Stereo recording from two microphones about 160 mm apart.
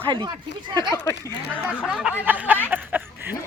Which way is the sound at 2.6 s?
10° right (ahead or behind).